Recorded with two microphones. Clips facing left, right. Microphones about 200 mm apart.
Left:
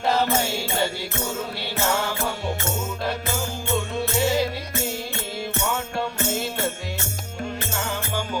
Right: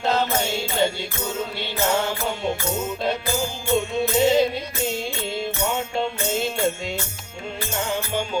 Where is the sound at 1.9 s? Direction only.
25° right (ahead or behind).